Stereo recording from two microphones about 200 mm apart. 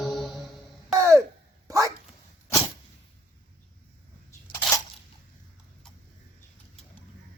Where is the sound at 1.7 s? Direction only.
15° right (ahead or behind).